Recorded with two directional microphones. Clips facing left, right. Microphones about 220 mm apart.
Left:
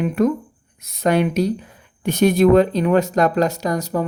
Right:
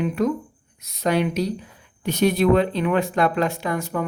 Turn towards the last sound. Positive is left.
turn(degrees=40)  # may be behind; listen again after turning